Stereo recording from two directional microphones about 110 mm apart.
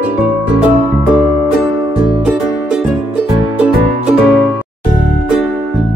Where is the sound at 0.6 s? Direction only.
10° right (ahead or behind).